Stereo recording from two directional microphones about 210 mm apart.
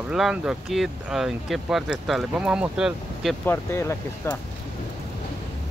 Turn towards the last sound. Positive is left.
turn(degrees=15)  # may be behind; listen again after turning